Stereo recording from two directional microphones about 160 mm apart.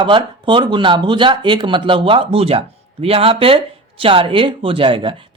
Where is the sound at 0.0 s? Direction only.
30° right (ahead or behind).